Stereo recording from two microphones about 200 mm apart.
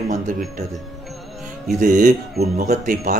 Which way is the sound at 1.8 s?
40° right (ahead or behind).